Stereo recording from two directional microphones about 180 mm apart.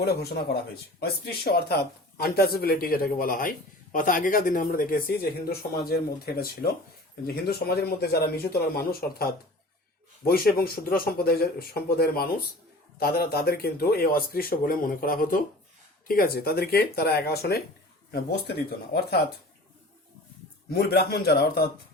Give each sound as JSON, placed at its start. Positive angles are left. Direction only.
{"t": 0.0, "sound": "speech", "side_deg": 65}
{"t": 20.7, "sound": "speech", "side_deg": 60}